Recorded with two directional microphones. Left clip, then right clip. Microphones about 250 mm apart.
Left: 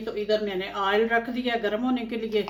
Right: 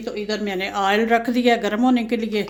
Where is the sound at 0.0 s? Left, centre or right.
Right.